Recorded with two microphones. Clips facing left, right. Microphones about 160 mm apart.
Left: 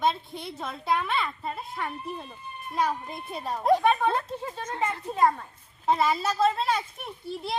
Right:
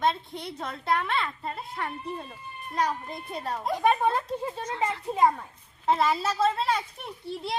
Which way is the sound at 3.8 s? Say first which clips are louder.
Even; 5° right (ahead or behind).